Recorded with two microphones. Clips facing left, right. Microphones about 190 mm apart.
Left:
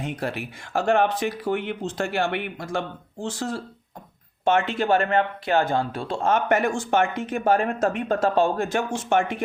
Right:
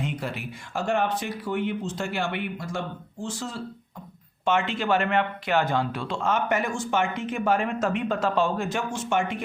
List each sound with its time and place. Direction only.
0.2 s speech: 60° left (ahead or behind)
4.4 s speech: 55° left (ahead or behind)
4.9 s speech: 35° left (ahead or behind)
6.2 s speech: 55° left (ahead or behind); by 8.1 s 35° left (ahead or behind)
8.2 s speech: 50° left (ahead or behind)